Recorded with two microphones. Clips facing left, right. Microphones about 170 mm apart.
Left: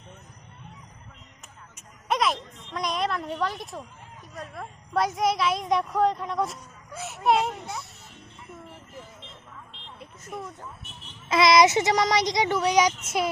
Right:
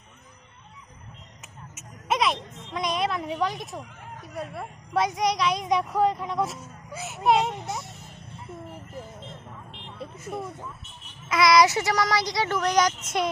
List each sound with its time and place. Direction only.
1.7 s speech: centre (ahead or behind)
10.3 s speech: 30° right (ahead or behind)
11.3 s speech: 25° left (ahead or behind); by 13.3 s 5° left (ahead or behind)